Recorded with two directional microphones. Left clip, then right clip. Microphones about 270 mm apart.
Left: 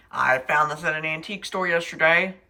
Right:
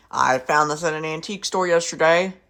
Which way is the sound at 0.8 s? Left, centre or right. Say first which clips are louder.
Right 1 dB; centre.